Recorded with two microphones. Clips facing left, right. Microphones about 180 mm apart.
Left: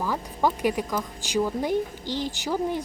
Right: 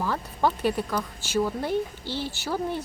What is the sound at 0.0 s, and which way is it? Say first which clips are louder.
Speech: even; 10° left (ahead or behind).